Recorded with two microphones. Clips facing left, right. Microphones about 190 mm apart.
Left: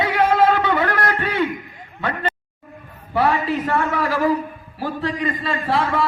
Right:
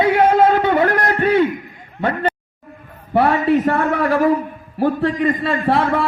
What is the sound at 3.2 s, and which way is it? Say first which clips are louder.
A man's voice: right 5 dB; 60° right (ahead or behind).